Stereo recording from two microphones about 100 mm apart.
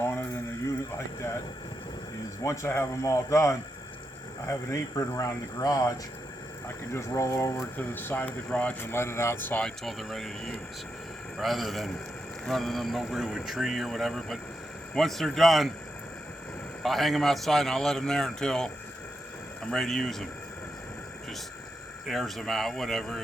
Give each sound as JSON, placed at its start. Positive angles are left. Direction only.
{"t": 0.0, "sound": "speech", "side_deg": 25}
{"t": 2.4, "sound": "speech", "side_deg": 30}
{"t": 7.8, "sound": "speech", "side_deg": 20}
{"t": 8.8, "sound": "speech", "side_deg": 25}
{"t": 9.6, "sound": "speech", "side_deg": 0}
{"t": 16.8, "sound": "speech", "side_deg": 0}
{"t": 19.7, "sound": "speech", "side_deg": 5}
{"t": 22.0, "sound": "speech", "side_deg": 0}